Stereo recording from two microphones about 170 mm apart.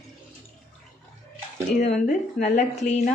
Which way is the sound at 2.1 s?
45° left (ahead or behind).